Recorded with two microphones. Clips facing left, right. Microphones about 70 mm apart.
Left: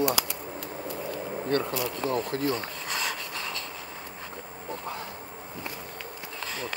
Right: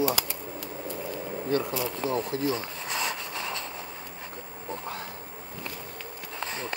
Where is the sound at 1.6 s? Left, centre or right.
Right.